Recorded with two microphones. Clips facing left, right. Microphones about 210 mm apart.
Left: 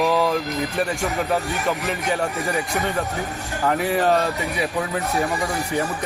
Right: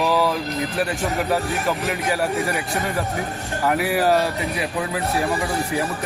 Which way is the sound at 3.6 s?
5° right (ahead or behind).